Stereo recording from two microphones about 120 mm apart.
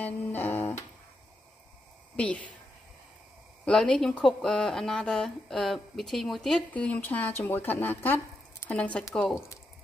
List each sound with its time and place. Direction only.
0.0 s speech: 15° left (ahead or behind)
2.1 s speech: 10° left (ahead or behind)
3.6 s speech: 5° left (ahead or behind)